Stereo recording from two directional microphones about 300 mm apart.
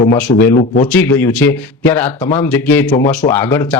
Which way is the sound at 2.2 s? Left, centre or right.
Centre.